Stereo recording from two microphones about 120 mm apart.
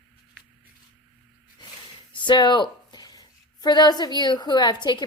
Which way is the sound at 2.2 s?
40° left (ahead or behind).